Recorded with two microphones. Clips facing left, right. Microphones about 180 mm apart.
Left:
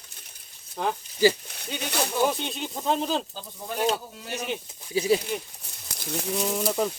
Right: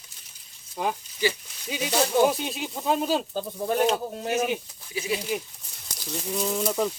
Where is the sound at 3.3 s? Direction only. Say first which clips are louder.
Right 8 dB; 50° right (ahead or behind).